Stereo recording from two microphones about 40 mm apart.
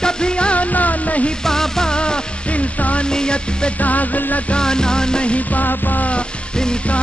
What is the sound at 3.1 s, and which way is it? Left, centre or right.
Music, centre.